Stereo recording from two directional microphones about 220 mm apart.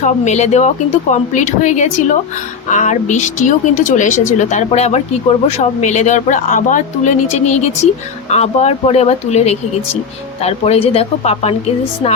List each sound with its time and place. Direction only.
0.0 s a woman's voice: 30° left (ahead or behind)